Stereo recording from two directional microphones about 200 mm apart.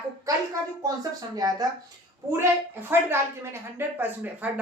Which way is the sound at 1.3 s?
20° right (ahead or behind).